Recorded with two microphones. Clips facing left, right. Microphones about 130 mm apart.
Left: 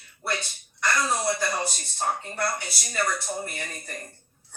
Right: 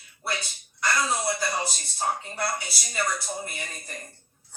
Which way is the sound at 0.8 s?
45° left (ahead or behind).